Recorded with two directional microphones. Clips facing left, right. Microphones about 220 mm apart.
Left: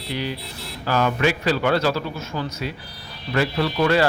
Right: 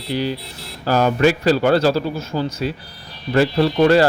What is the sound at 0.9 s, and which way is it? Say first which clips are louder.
Speech: right 5 dB; 40° right (ahead or behind).